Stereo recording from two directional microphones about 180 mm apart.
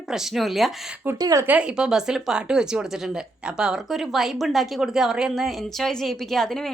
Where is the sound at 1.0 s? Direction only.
15° right (ahead or behind).